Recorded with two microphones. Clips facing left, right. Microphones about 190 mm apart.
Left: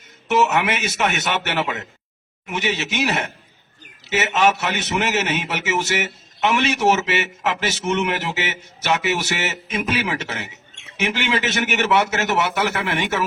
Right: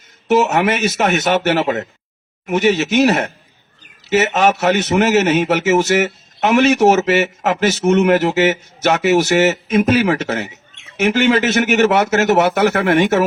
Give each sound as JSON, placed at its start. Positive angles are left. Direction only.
{"t": 0.3, "sound": "a man's voice", "side_deg": -40}